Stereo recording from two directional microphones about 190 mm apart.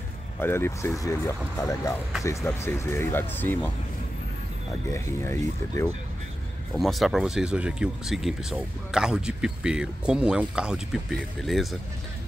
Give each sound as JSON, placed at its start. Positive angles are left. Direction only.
{"t": 0.4, "sound": "speech", "side_deg": 10}
{"t": 4.9, "sound": "speech", "side_deg": 15}
{"t": 6.7, "sound": "speech", "side_deg": 0}